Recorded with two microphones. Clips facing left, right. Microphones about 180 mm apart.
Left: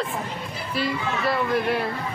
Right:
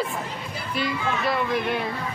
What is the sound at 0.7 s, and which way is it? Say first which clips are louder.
Children playing: even; centre (ahead or behind).